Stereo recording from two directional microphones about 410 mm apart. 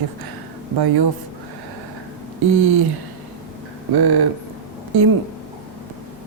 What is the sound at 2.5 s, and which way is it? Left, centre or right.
Speech, right.